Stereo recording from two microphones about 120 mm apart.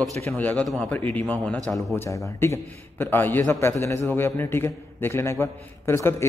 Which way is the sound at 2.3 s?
20° left (ahead or behind).